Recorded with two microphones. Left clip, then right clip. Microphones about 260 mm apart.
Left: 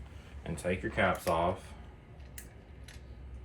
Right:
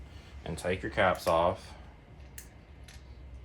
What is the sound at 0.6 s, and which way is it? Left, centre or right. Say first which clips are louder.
Speech: right 3 dB; right.